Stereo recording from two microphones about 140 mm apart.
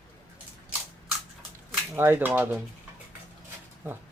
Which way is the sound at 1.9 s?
15° right (ahead or behind).